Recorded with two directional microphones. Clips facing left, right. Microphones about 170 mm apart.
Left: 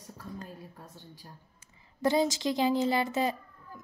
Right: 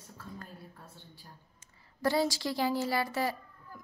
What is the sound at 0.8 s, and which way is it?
Speech, 40° left (ahead or behind).